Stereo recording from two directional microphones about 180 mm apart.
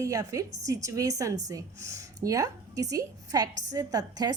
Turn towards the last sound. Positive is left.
turn(degrees=-20)  # may be behind; listen again after turning